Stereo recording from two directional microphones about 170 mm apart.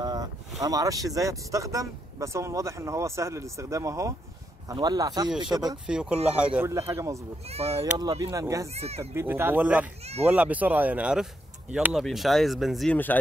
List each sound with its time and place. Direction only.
0.0 s speech: 20° right (ahead or behind)
5.5 s speech: 10° right (ahead or behind)
6.7 s speech: 15° right (ahead or behind)
7.4 s speech: 35° right (ahead or behind)
8.0 s speech: 20° right (ahead or behind)
8.7 s speech: 40° right (ahead or behind)
9.1 s speech: 15° right (ahead or behind)
10.0 s speech: 40° right (ahead or behind)
10.3 s speech: 10° right (ahead or behind); by 13.2 s 10° left (ahead or behind)